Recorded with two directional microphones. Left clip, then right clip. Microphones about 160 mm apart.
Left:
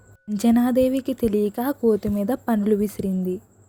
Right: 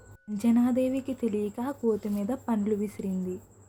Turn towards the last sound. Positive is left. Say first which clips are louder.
# left 8 dB
turn(degrees=35)  # may be behind; listen again after turning